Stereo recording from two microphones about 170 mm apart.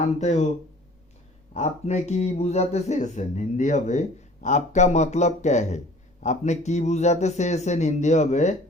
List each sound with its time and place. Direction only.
0.2 s speech: 40° left (ahead or behind)
1.5 s speech: 40° left (ahead or behind)